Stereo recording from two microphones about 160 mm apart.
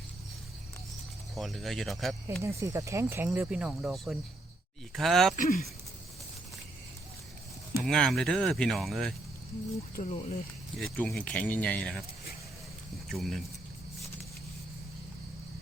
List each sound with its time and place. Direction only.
1.4 s speech: centre (ahead or behind)
2.4 s speech: 20° right (ahead or behind); by 5.3 s centre (ahead or behind)
5.4 s speech: 65° left (ahead or behind)
7.9 s speech: 5° left (ahead or behind)
9.9 s speech: 50° left (ahead or behind)
10.8 s speech: 5° left (ahead or behind)
13.1 s speech: centre (ahead or behind)